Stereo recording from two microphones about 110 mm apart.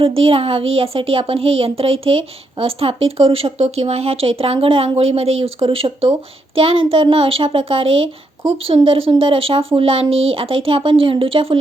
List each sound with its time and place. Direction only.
0.0 s speech: 60° right (ahead or behind)